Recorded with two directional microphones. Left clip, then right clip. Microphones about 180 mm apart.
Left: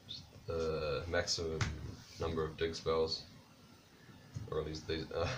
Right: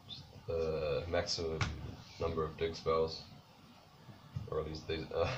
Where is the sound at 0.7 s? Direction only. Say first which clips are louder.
Right 1 dB; 15° left (ahead or behind).